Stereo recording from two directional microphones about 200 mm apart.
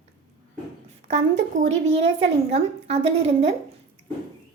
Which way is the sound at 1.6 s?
30° right (ahead or behind).